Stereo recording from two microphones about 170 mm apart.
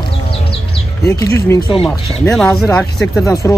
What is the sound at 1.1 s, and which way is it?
Speech, 15° left (ahead or behind).